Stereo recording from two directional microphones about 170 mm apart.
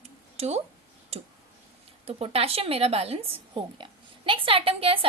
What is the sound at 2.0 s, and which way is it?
A woman's voice, 35° right (ahead or behind).